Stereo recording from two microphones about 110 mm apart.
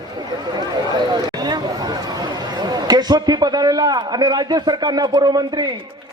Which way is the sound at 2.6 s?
40° right (ahead or behind).